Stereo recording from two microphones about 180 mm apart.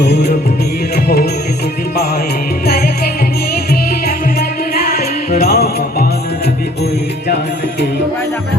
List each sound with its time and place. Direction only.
0.0 s music: 60° left (ahead or behind)
4.0 s music: 55° left (ahead or behind)